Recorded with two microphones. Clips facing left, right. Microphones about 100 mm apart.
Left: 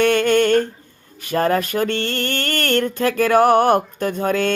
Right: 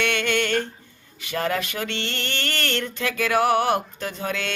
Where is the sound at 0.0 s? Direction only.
40° left (ahead or behind).